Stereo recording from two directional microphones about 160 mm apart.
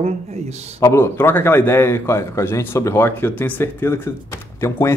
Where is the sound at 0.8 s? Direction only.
15° left (ahead or behind).